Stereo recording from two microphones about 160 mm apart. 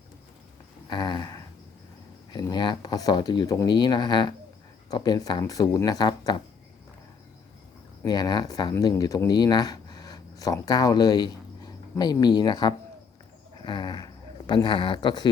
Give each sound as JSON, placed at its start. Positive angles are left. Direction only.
{"t": 0.9, "sound": "speech", "side_deg": 25}
{"t": 2.4, "sound": "speech", "side_deg": 25}
{"t": 8.0, "sound": "speech", "side_deg": 25}